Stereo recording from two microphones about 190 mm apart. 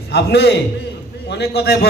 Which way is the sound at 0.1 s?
60° left (ahead or behind).